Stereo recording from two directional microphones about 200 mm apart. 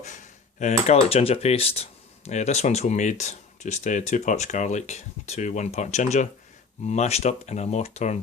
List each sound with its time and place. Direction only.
0.0 s speech: 35° left (ahead or behind)